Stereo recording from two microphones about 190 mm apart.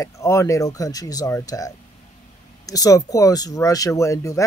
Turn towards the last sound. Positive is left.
turn(degrees=15)  # may be behind; listen again after turning